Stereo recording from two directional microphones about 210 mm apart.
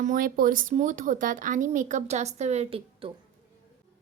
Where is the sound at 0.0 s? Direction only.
40° right (ahead or behind).